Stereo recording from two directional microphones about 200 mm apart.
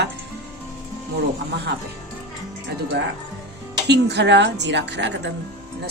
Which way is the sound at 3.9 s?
60° right (ahead or behind).